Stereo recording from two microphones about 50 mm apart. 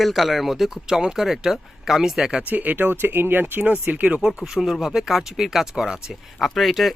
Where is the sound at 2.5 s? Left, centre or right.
Right.